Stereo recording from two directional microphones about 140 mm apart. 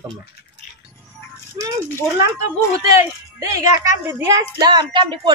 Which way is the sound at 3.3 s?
20° right (ahead or behind).